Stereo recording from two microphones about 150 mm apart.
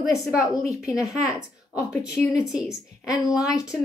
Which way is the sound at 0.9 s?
20° left (ahead or behind).